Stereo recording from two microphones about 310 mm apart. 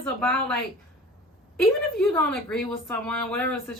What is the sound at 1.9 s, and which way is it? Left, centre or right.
A woman's voice, centre.